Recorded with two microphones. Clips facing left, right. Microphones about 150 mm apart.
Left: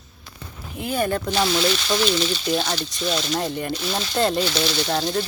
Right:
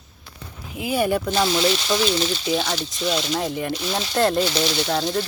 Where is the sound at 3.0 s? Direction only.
15° right (ahead or behind).